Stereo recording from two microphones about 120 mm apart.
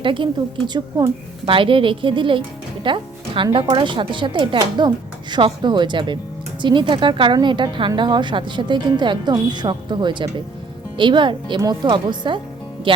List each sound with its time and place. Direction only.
0.0 s a woman's voice: 45° right (ahead or behind)
0.7 s a woman's voice: 30° right (ahead or behind)
1.5 s a woman's voice: 45° right (ahead or behind)